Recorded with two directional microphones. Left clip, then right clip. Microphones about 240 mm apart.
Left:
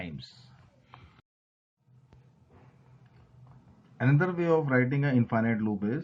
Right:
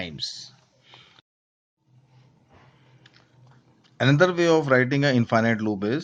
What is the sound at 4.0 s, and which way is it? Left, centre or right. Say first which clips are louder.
A man's voice: right 9 dB; right.